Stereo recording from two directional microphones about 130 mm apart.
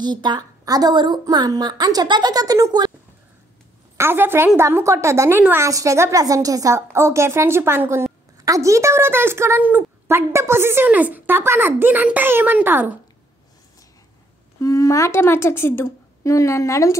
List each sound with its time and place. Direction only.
0.0 s a woman's voice: 35° right (ahead or behind)
3.9 s a woman's voice: 20° right (ahead or behind)
14.6 s a woman's voice: 25° left (ahead or behind)